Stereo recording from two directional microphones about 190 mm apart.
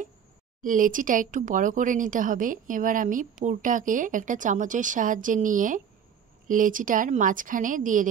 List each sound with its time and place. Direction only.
0.6 s speech: 45° right (ahead or behind)